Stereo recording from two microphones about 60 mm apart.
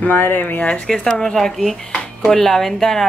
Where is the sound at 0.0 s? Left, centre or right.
Left.